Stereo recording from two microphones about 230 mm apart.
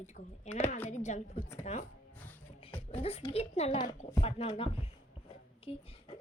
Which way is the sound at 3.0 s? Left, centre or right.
Left.